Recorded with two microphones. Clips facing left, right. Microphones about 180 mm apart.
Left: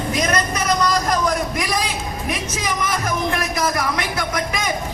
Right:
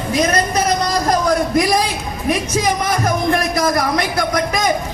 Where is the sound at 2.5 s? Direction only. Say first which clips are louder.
Right 6 dB; 35° right (ahead or behind).